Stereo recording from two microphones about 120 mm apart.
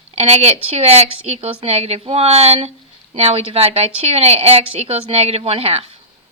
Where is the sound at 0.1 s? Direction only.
60° right (ahead or behind).